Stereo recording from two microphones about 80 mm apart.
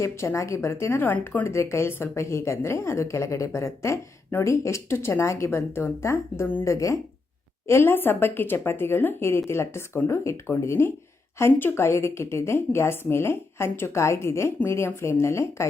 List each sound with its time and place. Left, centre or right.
0.0 s a woman's voice: left
6.7 s a woman's voice: left
7.7 s a woman's voice: left